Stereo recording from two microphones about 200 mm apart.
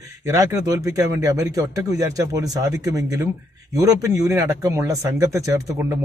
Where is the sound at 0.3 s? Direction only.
15° right (ahead or behind).